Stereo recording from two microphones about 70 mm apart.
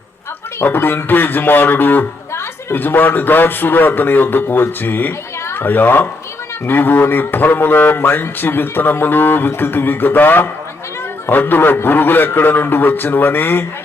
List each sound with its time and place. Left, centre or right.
0.6 s a man's voice: left